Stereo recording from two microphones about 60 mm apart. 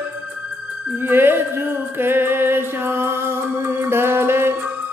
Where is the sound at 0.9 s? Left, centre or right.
Right.